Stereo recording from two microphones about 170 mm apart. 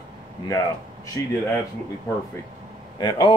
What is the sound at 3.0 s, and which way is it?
Speech, 25° left (ahead or behind).